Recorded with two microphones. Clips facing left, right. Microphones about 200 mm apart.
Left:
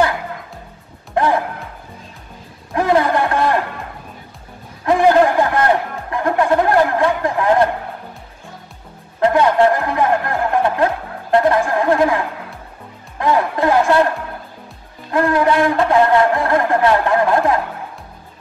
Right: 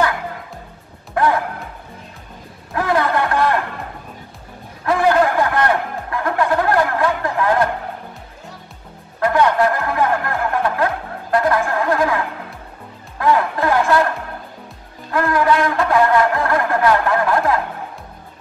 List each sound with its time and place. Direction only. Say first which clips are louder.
1.1 s music: left 1 dB; 25° left (ahead or behind)
2.7 s music: left 3 dB; 20° left (ahead or behind)
4.8 s music: left 3 dB; 20° left (ahead or behind)
9.2 s music: left 3 dB; 25° left (ahead or behind)
13.2 s music: left 1 dB; 20° left (ahead or behind)
15.0 s music: left 2 dB; 25° left (ahead or behind)